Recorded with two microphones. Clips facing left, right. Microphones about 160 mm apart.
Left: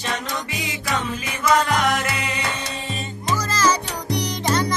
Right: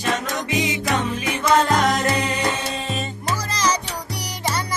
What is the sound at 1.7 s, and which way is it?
Music, 40° right (ahead or behind).